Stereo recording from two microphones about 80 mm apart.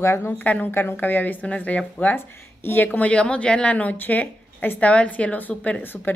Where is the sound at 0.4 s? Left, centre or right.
Centre.